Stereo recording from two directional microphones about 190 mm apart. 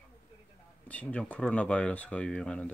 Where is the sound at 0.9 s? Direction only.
5° left (ahead or behind).